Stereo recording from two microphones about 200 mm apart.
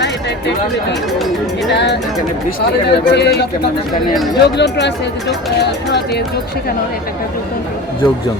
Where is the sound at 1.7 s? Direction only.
60° left (ahead or behind).